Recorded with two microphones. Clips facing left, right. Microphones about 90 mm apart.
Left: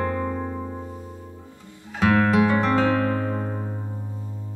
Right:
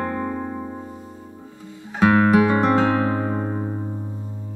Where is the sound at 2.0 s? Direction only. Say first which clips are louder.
Right 3 dB; 25° right (ahead or behind).